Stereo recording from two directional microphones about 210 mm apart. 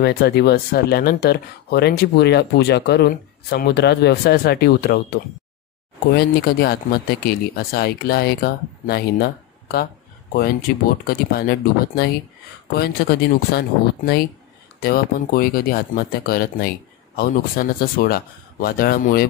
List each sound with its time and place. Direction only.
0.0 s speech: 50° left (ahead or behind)
6.1 s speech: 50° left (ahead or behind)